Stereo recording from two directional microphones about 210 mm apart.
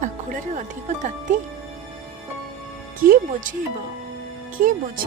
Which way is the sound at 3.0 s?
45° right (ahead or behind).